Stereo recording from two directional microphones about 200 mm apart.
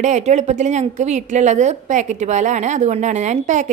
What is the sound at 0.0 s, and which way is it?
A woman's voice, 35° right (ahead or behind).